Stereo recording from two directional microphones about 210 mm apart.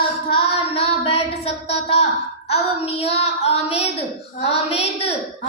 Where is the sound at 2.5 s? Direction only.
30° left (ahead or behind).